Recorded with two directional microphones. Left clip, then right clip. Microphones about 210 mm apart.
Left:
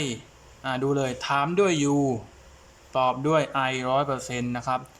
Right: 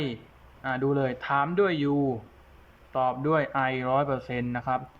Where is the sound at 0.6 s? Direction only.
Centre (ahead or behind).